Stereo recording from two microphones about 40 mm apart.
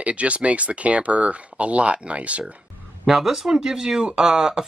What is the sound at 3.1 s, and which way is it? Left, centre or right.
Speech, centre.